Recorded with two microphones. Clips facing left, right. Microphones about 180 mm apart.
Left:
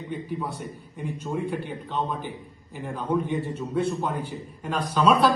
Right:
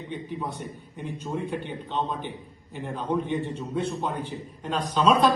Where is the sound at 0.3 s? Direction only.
Centre (ahead or behind).